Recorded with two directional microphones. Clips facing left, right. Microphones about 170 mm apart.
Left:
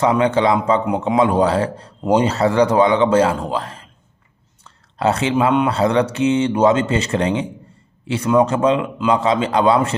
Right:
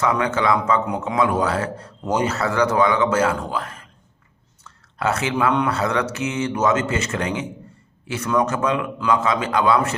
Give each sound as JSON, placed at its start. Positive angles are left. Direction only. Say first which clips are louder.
{"t": 0.0, "sound": "a man's voice", "louder": "left 5 dB", "side_deg": 30}